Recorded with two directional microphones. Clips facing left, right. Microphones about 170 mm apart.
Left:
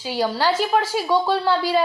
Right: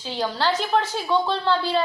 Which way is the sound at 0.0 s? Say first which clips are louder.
Left 3 dB; 10° left (ahead or behind).